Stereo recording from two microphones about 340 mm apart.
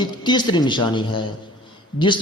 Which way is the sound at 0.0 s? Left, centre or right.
Centre.